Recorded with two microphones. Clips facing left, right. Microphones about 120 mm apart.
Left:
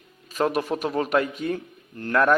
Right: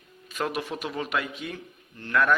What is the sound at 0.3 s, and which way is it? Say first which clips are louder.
A man's voice: left 6 dB; 40° left (ahead or behind).